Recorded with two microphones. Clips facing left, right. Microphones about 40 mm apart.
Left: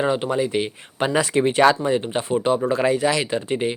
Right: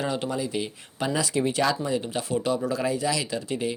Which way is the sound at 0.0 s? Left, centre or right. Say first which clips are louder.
Left 7 dB; left.